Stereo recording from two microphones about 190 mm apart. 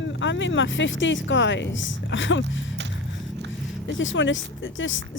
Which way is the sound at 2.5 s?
80° left.